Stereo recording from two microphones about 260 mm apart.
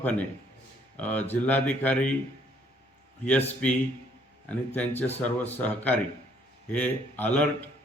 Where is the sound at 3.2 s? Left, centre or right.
Centre.